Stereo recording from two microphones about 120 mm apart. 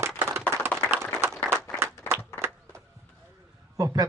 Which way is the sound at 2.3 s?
20° left (ahead or behind).